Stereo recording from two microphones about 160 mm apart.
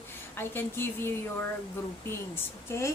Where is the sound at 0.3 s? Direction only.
15° left (ahead or behind).